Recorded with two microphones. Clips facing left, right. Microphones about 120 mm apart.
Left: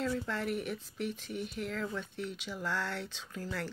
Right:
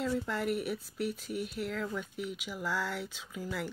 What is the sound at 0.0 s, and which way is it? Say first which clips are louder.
Speech: right 2 dB; 5° right (ahead or behind).